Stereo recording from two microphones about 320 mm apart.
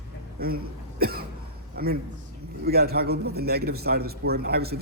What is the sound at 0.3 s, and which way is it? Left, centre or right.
A man's voice, right.